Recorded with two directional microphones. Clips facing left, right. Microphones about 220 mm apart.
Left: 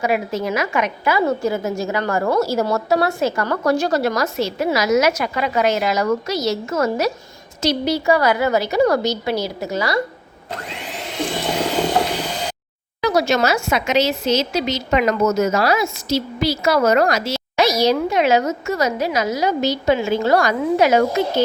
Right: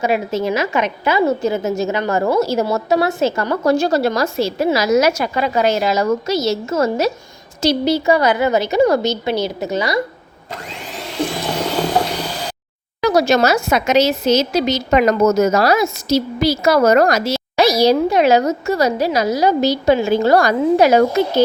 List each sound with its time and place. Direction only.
0.0 s a woman's voice: 25° right (ahead or behind)
13.0 s speech: 40° right (ahead or behind)